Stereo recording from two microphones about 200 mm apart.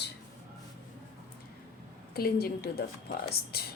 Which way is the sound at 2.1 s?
50° left (ahead or behind).